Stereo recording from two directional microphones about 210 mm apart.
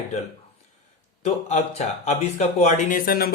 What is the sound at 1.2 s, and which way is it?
Speech, 30° left (ahead or behind).